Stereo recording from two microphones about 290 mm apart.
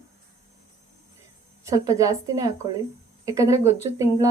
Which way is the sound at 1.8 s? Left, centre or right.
Centre.